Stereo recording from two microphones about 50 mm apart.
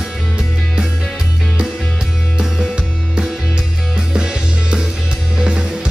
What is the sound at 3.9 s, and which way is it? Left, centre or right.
Music, centre.